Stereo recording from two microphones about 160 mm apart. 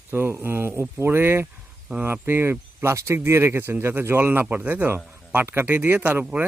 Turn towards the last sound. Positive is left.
turn(degrees=-10)  # may be behind; listen again after turning